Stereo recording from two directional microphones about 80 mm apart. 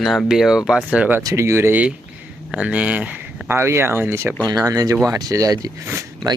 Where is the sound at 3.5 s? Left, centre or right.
Right.